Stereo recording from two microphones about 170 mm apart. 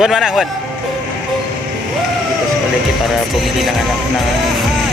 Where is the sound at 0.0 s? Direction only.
Centre (ahead or behind).